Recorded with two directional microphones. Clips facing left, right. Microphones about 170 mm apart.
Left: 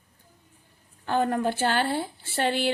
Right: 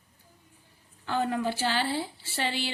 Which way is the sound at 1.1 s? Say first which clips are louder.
Left 4 dB; 50° left (ahead or behind).